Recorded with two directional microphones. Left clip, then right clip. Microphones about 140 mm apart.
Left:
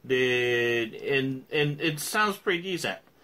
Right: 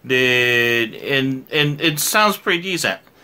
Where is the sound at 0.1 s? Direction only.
20° right (ahead or behind).